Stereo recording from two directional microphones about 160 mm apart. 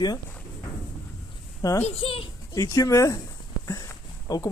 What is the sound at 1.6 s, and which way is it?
Speech, 20° left (ahead or behind).